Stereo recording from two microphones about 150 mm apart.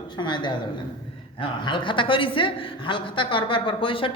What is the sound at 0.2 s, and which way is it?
A woman's voice, 30° left (ahead or behind).